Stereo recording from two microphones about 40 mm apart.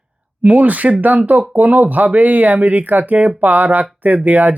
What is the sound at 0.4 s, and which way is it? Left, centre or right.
Speech, right.